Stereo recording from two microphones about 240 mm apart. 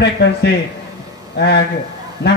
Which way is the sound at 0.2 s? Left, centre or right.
Left.